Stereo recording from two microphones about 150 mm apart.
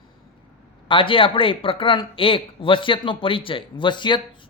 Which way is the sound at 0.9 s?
35° left (ahead or behind).